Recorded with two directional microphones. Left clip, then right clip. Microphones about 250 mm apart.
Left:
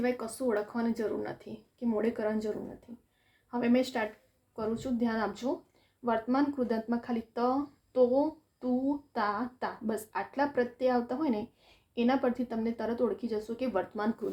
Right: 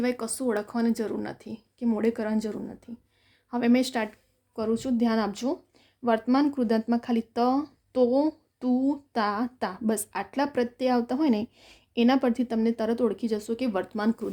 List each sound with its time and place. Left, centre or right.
0.0 s speech: right